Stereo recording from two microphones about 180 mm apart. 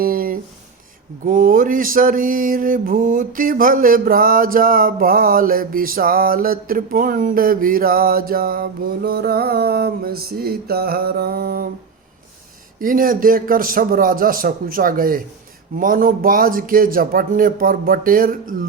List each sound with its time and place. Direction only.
0.0 s a sound: 55° right (ahead or behind)
1.2 s mantra: 50° right (ahead or behind)
12.8 s mantra: 50° right (ahead or behind)